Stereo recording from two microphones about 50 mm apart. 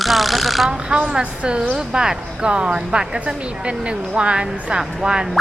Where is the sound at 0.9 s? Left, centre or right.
Right.